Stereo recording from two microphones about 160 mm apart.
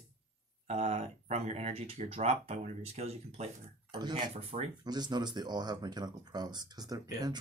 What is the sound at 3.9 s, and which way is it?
Speech, 25° right (ahead or behind).